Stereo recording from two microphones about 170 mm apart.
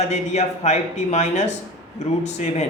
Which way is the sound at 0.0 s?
40° left (ahead or behind).